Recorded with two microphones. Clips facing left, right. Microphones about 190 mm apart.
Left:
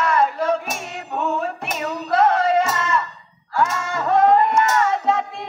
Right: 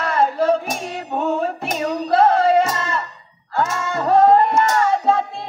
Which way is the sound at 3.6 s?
30° right (ahead or behind).